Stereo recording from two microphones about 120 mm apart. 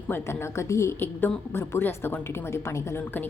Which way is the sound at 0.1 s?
20° left (ahead or behind).